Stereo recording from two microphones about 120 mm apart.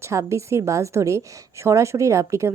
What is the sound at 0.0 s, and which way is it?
A woman's voice, 25° right (ahead or behind).